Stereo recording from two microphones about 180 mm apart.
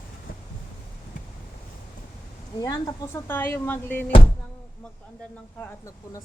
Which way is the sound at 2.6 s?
20° left (ahead or behind).